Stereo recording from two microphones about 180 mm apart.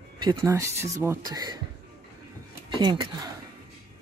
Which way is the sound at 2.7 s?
25° right (ahead or behind).